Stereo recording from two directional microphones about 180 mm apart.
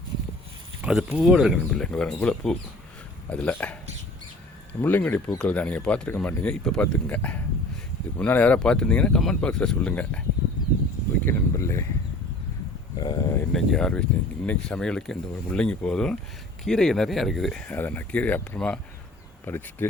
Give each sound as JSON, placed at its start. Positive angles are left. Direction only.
{"t": 0.8, "sound": "speech", "side_deg": -5}
{"t": 4.8, "sound": "speech", "side_deg": 10}
{"t": 11.3, "sound": "speech", "side_deg": 15}
{"t": 13.0, "sound": "speech", "side_deg": 25}
{"t": 13.5, "sound": "speech", "side_deg": 0}